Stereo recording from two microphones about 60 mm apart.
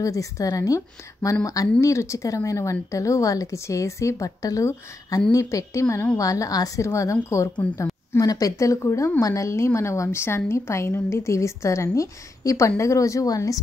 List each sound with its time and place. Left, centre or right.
0.0 s a woman's voice: left
1.8 s speech: left
4.4 s speech: left
5.3 s speech: left
6.1 s a woman's voice: left
8.2 s a woman's voice: left